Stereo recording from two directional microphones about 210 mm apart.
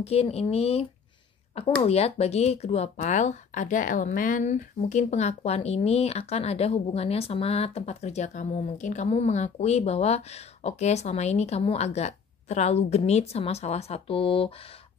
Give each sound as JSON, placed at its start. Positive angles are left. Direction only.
{"t": 0.0, "sound": "speech", "side_deg": 30}